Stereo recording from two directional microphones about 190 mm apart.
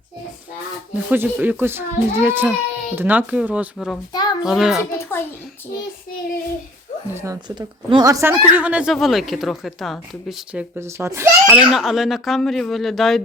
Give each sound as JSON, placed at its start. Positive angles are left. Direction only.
{"t": 1.1, "sound": "speech", "side_deg": -10}
{"t": 4.1, "sound": "a sound", "side_deg": 20}
{"t": 4.4, "sound": "speech", "side_deg": 0}
{"t": 4.8, "sound": "a sound", "side_deg": 15}
{"t": 7.1, "sound": "speech", "side_deg": -15}
{"t": 11.5, "sound": "speech", "side_deg": 0}